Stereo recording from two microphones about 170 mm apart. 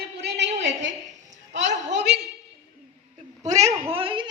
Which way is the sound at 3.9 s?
30° right (ahead or behind).